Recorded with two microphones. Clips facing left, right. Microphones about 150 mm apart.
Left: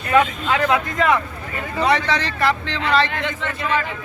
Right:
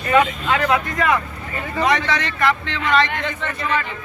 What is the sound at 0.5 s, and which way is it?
Speech, 20° left (ahead or behind).